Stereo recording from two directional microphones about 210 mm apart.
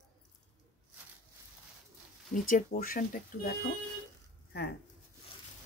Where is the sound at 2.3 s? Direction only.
40° left (ahead or behind).